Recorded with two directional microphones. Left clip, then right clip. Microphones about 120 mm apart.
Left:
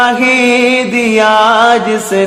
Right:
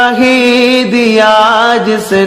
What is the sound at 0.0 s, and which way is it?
Music, 40° right (ahead or behind).